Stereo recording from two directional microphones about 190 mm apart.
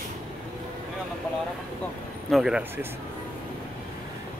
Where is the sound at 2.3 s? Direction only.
5° right (ahead or behind).